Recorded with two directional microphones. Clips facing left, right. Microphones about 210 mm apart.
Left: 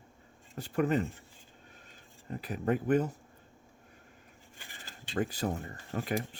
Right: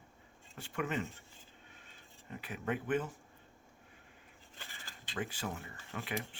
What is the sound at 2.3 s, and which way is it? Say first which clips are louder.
Speech: left 7 dB; 35° left (ahead or behind).